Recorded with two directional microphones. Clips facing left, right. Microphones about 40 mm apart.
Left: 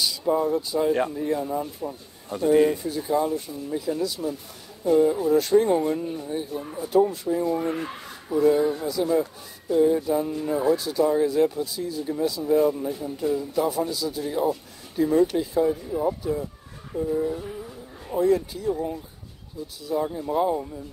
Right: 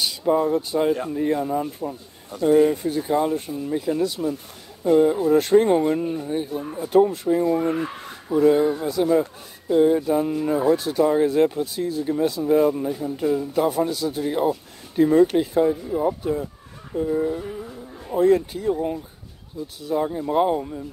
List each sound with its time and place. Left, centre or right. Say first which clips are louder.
0.0 s speech: right 3 dB; right
20.2 s speech: right 4 dB; right